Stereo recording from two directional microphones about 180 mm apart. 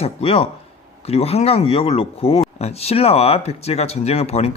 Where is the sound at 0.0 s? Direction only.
35° left (ahead or behind).